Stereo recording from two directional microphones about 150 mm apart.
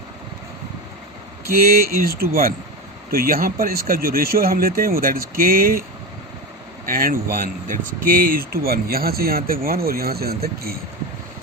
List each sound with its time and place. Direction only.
1.5 s speech: 80° right
6.8 s speech: 70° right (ahead or behind); by 10.8 s 90° right